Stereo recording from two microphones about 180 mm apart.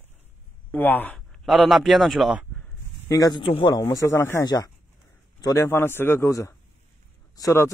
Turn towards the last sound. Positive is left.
turn(degrees=15)  # may be behind; listen again after turning